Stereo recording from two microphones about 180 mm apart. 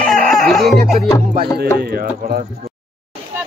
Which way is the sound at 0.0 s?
5° left (ahead or behind).